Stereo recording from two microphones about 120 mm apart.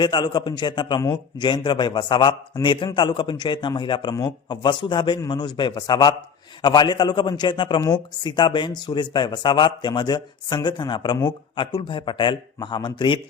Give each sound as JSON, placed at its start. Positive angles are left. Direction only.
{"t": 0.0, "sound": "a man's voice", "side_deg": 40}